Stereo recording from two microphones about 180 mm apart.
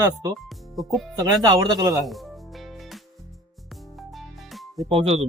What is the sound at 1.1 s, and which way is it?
Speech, 20° right (ahead or behind).